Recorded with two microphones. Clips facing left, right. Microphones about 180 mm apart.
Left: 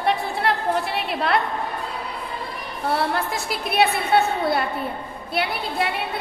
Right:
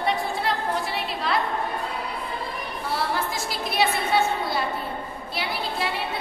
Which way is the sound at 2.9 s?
60° left (ahead or behind).